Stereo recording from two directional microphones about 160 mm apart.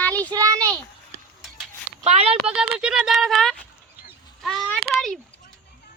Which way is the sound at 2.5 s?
5° right (ahead or behind).